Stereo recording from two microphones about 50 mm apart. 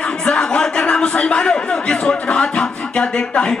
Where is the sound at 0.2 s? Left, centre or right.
Centre.